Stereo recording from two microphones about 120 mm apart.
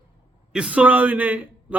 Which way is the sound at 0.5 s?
10° right (ahead or behind).